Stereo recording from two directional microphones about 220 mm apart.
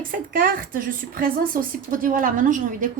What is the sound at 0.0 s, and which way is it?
A woman's voice, 40° right (ahead or behind).